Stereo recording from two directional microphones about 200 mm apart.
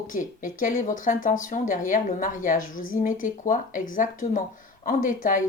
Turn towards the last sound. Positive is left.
turn(degrees=40)  # may be behind; listen again after turning